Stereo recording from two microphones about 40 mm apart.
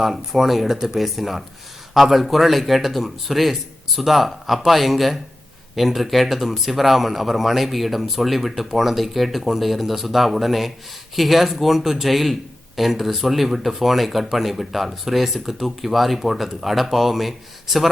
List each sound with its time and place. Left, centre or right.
0.0 s speech: centre